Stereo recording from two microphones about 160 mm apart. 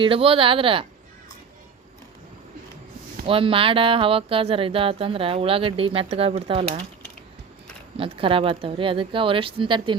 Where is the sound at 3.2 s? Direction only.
35° right (ahead or behind).